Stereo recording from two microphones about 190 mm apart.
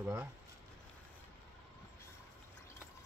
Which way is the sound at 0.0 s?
10° right (ahead or behind).